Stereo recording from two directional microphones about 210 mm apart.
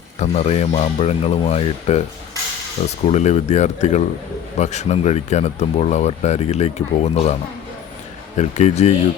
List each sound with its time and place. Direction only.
0.2 s speech: 30° left (ahead or behind)
8.4 s speech: 35° left (ahead or behind)